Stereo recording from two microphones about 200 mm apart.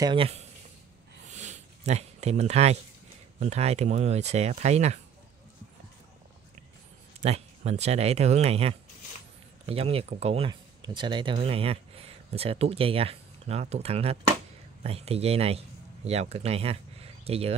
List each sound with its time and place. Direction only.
0.0 s speech: 25° right (ahead or behind)
1.3 s a sound: 35° right (ahead or behind)
3.3 s speech: 35° right (ahead or behind)
7.2 s speech: 30° right (ahead or behind)